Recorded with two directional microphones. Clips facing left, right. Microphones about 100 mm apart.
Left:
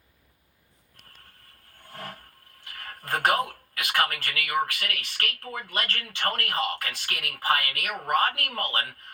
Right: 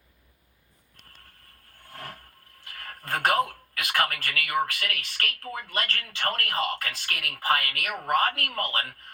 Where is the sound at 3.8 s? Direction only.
20° left (ahead or behind).